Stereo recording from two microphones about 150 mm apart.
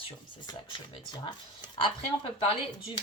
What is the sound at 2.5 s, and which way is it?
Speech, 30° left (ahead or behind).